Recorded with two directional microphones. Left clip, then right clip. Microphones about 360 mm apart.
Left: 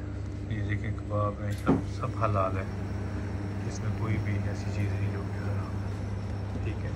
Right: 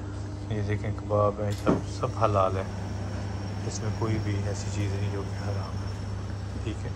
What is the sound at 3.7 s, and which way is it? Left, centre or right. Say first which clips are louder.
Speech: right 6 dB; centre.